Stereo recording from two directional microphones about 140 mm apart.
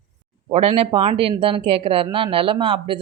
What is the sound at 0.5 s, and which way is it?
Speech, 45° right (ahead or behind).